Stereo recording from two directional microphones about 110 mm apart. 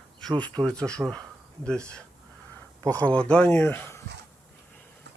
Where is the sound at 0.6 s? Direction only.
10° left (ahead or behind).